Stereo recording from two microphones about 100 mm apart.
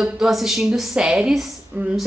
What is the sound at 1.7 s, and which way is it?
Speech, 15° right (ahead or behind).